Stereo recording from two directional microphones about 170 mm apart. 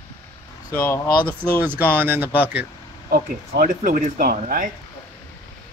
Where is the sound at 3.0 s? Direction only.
60° right (ahead or behind).